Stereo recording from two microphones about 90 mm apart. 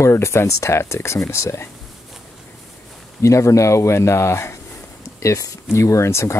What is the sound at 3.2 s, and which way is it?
Speech, 35° left (ahead or behind).